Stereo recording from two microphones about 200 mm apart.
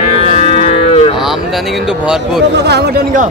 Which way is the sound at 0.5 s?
30° left (ahead or behind).